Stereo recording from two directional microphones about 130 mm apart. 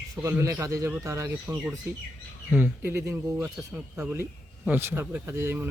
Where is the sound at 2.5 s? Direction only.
15° right (ahead or behind).